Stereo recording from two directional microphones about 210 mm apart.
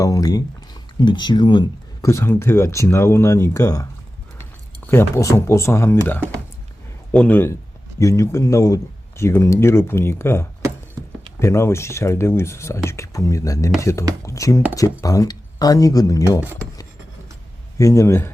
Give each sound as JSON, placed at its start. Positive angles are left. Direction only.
{"t": 0.0, "sound": "speech", "side_deg": 15}
{"t": 17.7, "sound": "speech", "side_deg": 15}